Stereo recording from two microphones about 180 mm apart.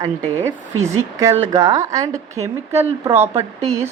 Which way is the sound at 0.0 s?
15° right (ahead or behind).